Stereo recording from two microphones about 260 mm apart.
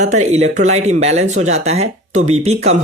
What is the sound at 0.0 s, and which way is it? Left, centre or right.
Speech, right.